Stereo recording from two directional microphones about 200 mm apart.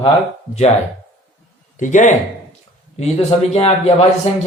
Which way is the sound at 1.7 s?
40° left (ahead or behind).